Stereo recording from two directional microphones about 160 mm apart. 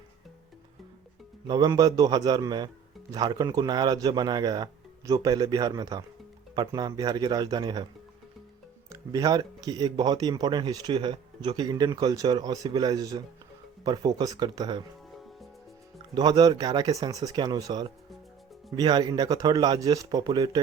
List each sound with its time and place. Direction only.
1.5 s speech: 25° right (ahead or behind)
8.9 s speech: 25° right (ahead or behind)
16.1 s speech: 25° right (ahead or behind)